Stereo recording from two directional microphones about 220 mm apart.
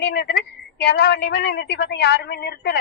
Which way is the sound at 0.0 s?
45° left (ahead or behind).